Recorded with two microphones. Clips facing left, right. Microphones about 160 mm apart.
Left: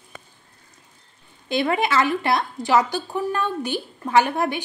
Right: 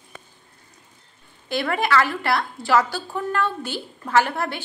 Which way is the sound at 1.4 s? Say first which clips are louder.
Left 2 dB; 20° left (ahead or behind).